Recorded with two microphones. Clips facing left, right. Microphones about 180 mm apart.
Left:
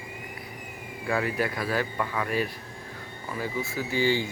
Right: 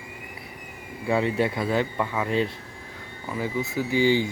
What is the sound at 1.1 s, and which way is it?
Speech, 25° right (ahead or behind).